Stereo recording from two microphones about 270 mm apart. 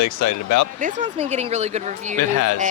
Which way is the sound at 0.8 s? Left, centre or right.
Right.